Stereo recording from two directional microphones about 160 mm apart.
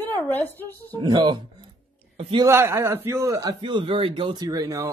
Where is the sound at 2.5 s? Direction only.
15° right (ahead or behind).